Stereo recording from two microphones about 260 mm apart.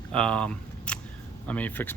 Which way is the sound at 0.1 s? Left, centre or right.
Centre.